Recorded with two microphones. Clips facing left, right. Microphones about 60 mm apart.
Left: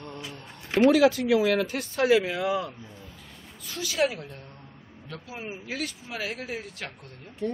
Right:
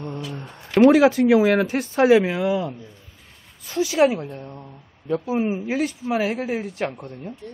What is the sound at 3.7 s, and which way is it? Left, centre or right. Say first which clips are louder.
Speech: right 8 dB; right.